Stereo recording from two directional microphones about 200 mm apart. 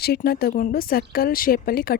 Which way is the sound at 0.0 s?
50° left (ahead or behind).